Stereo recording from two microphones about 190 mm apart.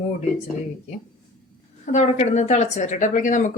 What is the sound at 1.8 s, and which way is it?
A woman's voice, 40° left (ahead or behind).